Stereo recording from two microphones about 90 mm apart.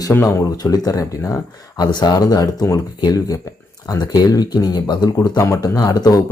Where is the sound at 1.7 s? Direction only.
55° left (ahead or behind).